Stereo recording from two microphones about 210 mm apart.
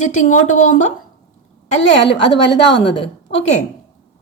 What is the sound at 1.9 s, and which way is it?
A woman's voice, 55° left (ahead or behind).